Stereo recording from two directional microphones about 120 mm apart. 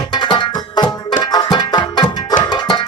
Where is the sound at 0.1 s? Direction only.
40° left (ahead or behind).